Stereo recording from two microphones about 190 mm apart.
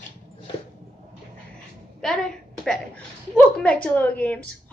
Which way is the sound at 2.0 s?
Centre (ahead or behind).